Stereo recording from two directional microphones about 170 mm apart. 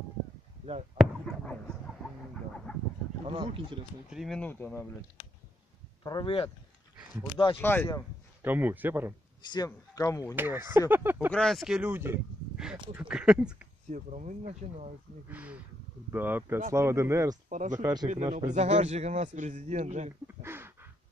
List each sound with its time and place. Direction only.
0.9 s chicken: 5° left (ahead or behind)
3.3 s speech: 35° right (ahead or behind)
4.1 s speech: centre (ahead or behind)
6.0 s a man's voice: 30° left (ahead or behind)
7.5 s speech: 10° left (ahead or behind)
8.4 s a man's voice: 10° right (ahead or behind)
9.4 s a man's voice: 25° left (ahead or behind)
10.3 s a man's voice: 15° right (ahead or behind)
11.3 s speech: centre (ahead or behind)
13.8 s a man's voice: 45° right (ahead or behind)
15.2 s a man's voice: 10° right (ahead or behind)
17.5 s a man's voice: 50° right (ahead or behind)
20.2 s a sound: 15° right (ahead or behind)